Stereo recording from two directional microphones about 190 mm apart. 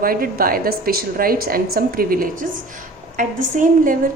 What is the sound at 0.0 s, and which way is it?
A woman's voice, 50° right (ahead or behind).